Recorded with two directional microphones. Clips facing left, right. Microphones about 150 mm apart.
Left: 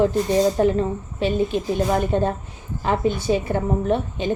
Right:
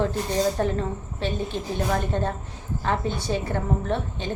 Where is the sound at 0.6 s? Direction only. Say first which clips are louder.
Left 7 dB; 20° left (ahead or behind).